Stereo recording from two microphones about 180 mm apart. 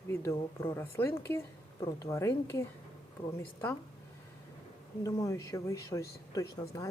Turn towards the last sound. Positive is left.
turn(degrees=20)  # may be behind; listen again after turning